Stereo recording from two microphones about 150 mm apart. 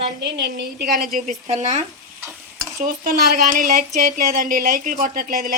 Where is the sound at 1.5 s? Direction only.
50° right (ahead or behind).